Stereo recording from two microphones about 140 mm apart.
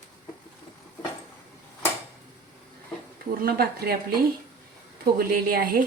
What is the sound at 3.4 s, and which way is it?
Speech, 90° right.